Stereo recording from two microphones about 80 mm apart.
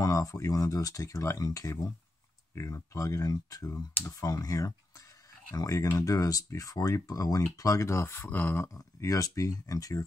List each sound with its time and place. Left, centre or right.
0.0 s speech: left
8.7 s speech: left